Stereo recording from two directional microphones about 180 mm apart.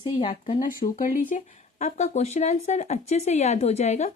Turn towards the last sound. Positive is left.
turn(degrees=40)  # may be behind; listen again after turning